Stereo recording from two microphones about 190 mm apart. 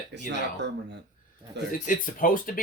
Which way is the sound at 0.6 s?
65° right (ahead or behind).